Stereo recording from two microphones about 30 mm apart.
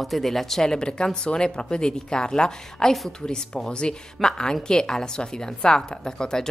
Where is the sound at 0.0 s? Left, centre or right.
Centre.